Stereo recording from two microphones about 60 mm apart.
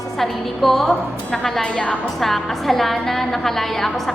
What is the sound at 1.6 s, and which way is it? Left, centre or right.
Speech, left.